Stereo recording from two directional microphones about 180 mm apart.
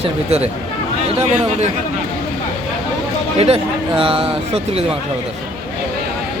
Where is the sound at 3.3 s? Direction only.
35° right (ahead or behind).